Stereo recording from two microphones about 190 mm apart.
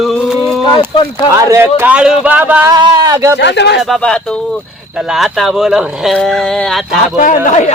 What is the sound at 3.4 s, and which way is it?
Speech, 65° left (ahead or behind).